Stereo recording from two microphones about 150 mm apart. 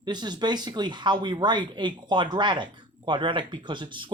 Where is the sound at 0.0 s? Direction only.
30° right (ahead or behind).